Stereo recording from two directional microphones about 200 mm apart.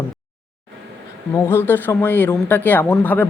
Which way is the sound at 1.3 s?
10° left (ahead or behind).